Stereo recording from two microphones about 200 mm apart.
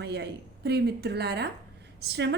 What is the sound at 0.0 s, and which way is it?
A woman's voice, 55° right (ahead or behind).